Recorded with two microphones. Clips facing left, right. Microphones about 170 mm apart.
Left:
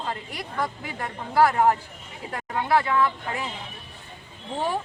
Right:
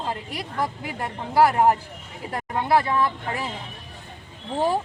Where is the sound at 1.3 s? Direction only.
15° right (ahead or behind).